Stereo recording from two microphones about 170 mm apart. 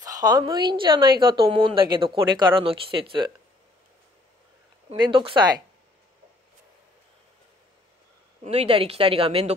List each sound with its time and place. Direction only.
0.0 s a woman's voice: 20° right (ahead or behind)
4.8 s a woman's voice: 30° right (ahead or behind)
8.5 s speech: 35° right (ahead or behind)